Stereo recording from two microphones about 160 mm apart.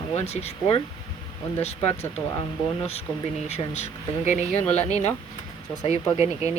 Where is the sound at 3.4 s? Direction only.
40° left (ahead or behind).